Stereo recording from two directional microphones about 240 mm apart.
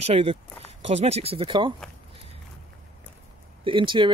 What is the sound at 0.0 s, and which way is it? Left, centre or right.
Speech, right.